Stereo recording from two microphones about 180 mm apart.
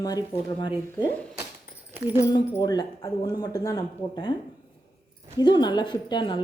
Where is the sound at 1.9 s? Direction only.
10° right (ahead or behind).